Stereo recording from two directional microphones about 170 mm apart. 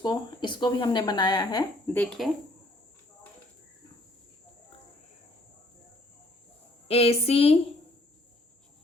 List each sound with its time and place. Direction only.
0.0 s speech: 25° left (ahead or behind)
1.9 s speech: 5° left (ahead or behind)
6.8 s speech: 35° left (ahead or behind)